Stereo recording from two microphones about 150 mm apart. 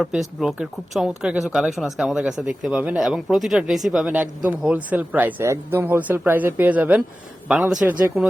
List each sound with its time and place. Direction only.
0.0 s a man's voice: centre (ahead or behind)